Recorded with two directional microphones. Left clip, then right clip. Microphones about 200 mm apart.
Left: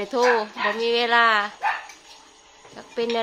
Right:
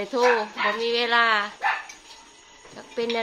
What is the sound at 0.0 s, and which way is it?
Speech, 30° left (ahead or behind).